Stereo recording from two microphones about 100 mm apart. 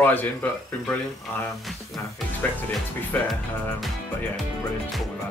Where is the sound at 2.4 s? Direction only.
20° left (ahead or behind).